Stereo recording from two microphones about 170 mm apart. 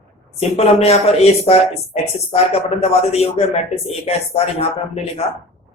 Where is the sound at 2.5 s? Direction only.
35° left (ahead or behind).